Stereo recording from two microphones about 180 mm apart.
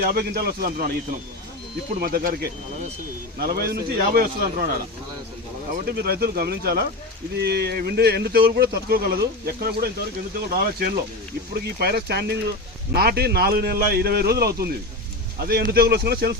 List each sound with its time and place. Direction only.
0.0 s speech: 55° right (ahead or behind)
2.0 s speech: 55° right (ahead or behind)